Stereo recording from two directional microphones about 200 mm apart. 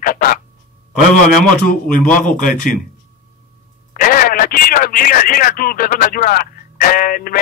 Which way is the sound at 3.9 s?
45° left (ahead or behind).